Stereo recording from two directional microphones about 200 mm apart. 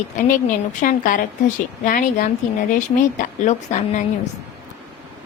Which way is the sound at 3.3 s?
35° left (ahead or behind).